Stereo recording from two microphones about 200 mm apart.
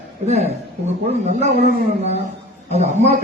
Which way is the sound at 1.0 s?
35° right (ahead or behind).